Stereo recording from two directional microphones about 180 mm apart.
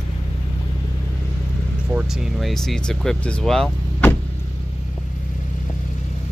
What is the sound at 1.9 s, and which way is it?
Speech, 5° right (ahead or behind).